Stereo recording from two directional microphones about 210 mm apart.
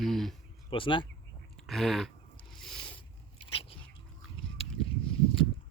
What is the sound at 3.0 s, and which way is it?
Biting, 25° left (ahead or behind).